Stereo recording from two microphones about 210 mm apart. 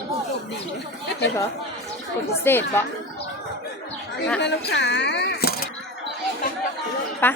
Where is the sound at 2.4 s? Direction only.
10° left (ahead or behind).